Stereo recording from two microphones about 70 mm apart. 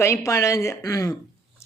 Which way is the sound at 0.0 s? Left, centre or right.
Left.